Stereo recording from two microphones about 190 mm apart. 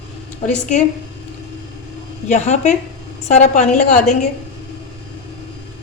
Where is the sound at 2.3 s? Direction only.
35° left (ahead or behind).